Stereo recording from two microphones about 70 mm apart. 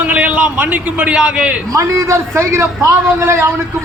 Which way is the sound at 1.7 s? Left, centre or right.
Right.